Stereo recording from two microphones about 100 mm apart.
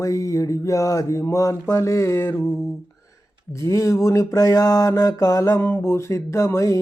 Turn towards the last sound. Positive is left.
turn(degrees=30)  # may be behind; listen again after turning